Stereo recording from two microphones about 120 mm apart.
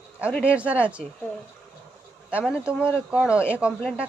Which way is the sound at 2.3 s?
10° right (ahead or behind).